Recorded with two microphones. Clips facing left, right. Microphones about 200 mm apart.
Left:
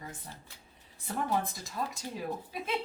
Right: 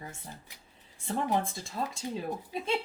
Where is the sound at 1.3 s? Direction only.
25° right (ahead or behind).